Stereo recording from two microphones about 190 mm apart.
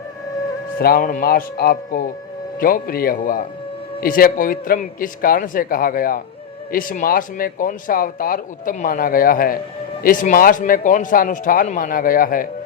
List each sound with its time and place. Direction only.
0.8 s speech: 50° left (ahead or behind)